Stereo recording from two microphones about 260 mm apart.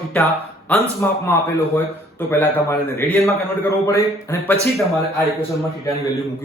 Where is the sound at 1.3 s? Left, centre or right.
Centre.